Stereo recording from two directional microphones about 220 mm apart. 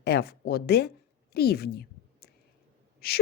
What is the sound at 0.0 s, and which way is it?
Speech, 45° left (ahead or behind).